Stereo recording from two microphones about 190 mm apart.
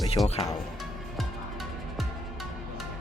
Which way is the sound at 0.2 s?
Centre (ahead or behind).